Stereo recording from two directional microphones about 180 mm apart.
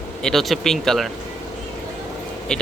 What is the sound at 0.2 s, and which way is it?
Speech, centre (ahead or behind).